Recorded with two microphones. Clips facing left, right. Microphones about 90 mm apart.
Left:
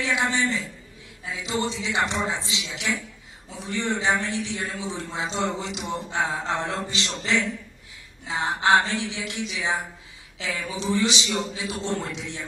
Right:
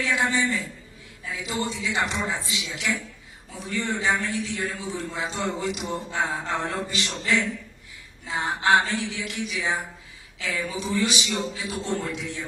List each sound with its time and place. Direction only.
0.0 s a man's voice: 20° left (ahead or behind)